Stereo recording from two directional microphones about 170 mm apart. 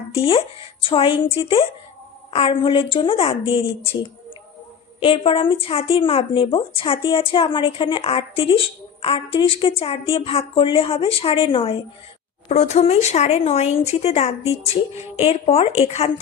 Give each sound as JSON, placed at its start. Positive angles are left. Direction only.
{"t": 0.1, "sound": "speech", "side_deg": 35}